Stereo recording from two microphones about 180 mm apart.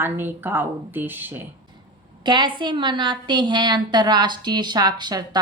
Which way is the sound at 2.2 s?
25° right (ahead or behind).